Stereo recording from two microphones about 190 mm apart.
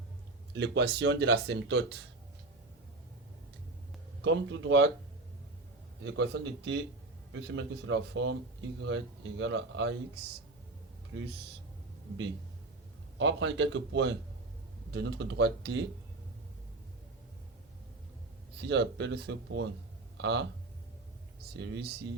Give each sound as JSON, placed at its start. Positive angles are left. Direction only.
{"t": 0.5, "sound": "speech", "side_deg": -65}
{"t": 4.2, "sound": "a man's voice", "side_deg": -80}
{"t": 6.0, "sound": "a man's voice", "side_deg": -65}
{"t": 13.1, "sound": "a man's voice", "side_deg": -75}
{"t": 18.5, "sound": "speech", "side_deg": -60}
{"t": 21.5, "sound": "speech", "side_deg": -60}